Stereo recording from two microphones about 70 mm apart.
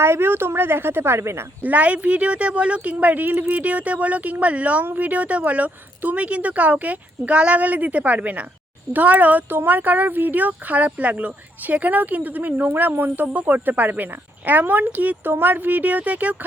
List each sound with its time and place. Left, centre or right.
0.0 s a woman's voice: right
1.6 s speech: right